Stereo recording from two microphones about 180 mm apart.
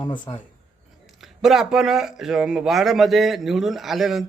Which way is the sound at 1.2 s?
Centre (ahead or behind).